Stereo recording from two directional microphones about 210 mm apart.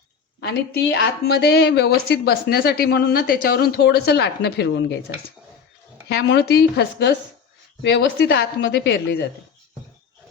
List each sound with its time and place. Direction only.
0.4 s a woman's voice: 55° left (ahead or behind)